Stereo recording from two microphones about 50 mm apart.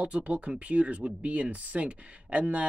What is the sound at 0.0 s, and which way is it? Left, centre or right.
Speech, right.